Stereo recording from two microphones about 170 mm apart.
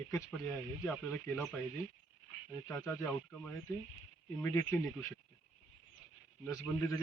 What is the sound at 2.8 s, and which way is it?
Speech, 5° left (ahead or behind).